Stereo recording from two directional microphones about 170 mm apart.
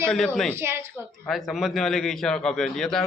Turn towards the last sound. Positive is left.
turn(degrees=5)  # may be behind; listen again after turning